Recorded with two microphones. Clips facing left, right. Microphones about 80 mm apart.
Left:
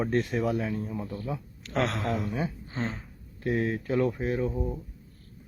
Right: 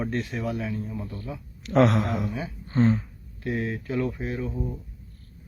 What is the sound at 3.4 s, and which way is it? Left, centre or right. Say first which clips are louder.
Speech: left 1 dB; left.